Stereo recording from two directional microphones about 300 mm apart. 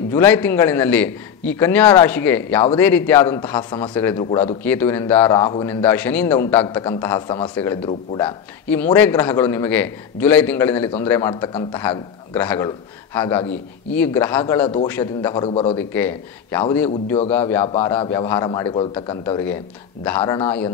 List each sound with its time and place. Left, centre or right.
0.1 s a man's voice: centre
15.9 s a man's voice: centre